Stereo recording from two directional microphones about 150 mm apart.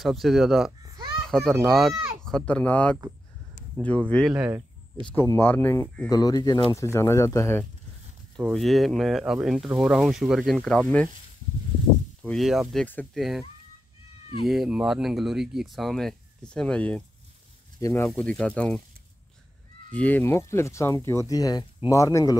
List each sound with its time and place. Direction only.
0.0 s speech: centre (ahead or behind)
4.3 s speech: 10° right (ahead or behind)
5.0 s speech: 15° left (ahead or behind)
8.4 s speech: centre (ahead or behind)
12.2 s speech: centre (ahead or behind)
12.8 s speech: 10° left (ahead or behind)
14.5 s speech: 5° right (ahead or behind)
17.7 s speech: 20° left (ahead or behind)
19.9 s speech: 10° left (ahead or behind)